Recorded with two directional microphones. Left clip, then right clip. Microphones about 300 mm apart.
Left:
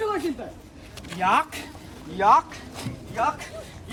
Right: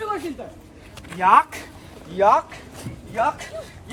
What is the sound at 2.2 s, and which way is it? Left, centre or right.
Speech, right.